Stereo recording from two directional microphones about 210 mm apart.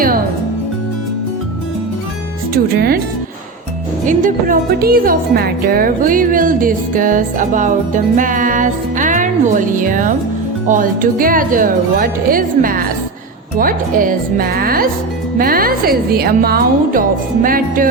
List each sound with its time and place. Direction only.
2.5 s speech: 45° right (ahead or behind)
4.0 s speech: 40° right (ahead or behind)